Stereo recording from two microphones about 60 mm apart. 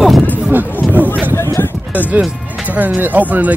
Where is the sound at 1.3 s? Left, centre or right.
Left.